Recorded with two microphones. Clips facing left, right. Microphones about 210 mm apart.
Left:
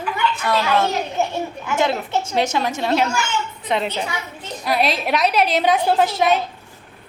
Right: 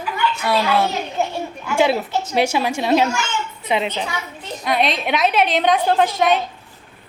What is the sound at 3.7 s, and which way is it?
A woman's voice, centre (ahead or behind).